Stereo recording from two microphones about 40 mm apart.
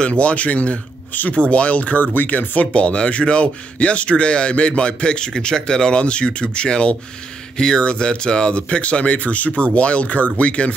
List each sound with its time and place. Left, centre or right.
0.0 s speech: left
1.1 s speech: left
1.5 s speech: left